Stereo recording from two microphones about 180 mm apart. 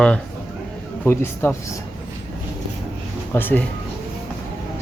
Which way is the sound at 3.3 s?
10° left (ahead or behind).